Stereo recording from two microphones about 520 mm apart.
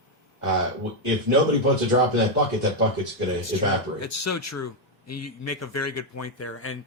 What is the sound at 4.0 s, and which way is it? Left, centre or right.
Speech, left.